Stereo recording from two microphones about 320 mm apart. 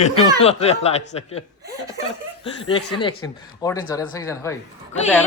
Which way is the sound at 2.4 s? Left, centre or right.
Centre.